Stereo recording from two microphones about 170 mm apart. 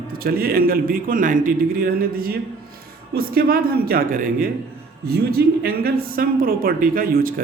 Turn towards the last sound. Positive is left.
turn(degrees=-60)  # may be behind; listen again after turning